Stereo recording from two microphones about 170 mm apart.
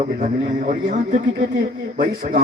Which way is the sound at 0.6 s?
45° right (ahead or behind).